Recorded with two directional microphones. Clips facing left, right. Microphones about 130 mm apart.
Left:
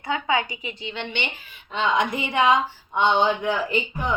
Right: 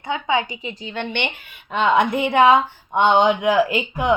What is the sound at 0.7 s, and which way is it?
Speech, 40° right (ahead or behind).